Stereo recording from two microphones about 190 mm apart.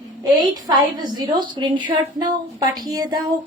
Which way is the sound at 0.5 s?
20° right (ahead or behind).